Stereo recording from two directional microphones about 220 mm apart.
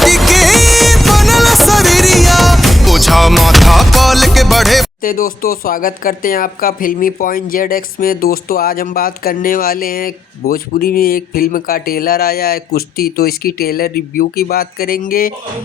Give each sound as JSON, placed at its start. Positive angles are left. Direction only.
{"t": 0.0, "sound": "music", "side_deg": 0}
{"t": 5.0, "sound": "speech", "side_deg": 40}